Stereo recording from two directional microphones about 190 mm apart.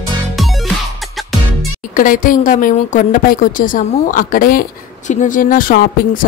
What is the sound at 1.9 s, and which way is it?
A woman's voice, 45° left (ahead or behind).